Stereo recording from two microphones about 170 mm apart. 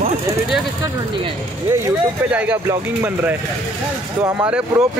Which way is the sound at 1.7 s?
10° right (ahead or behind).